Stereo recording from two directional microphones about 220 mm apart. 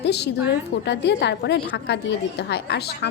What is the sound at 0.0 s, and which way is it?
A woman's voice, 50° left (ahead or behind).